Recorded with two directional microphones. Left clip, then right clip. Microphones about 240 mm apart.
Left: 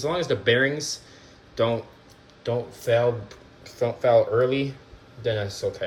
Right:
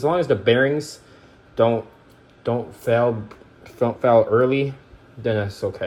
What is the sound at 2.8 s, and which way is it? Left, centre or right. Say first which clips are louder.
Speech: right 3 dB; centre.